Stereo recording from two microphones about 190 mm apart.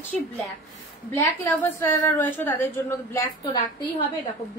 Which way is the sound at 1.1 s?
15° left (ahead or behind).